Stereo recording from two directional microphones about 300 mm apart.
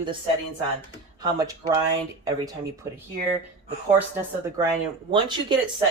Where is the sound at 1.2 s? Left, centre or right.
Centre.